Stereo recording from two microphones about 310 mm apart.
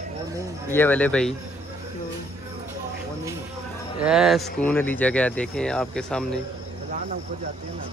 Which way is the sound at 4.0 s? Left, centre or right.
Centre.